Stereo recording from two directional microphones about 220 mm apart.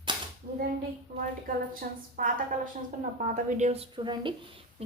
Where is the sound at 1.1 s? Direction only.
45° right (ahead or behind).